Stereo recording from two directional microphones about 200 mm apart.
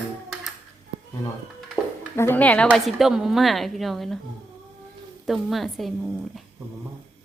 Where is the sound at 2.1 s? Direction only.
10° left (ahead or behind).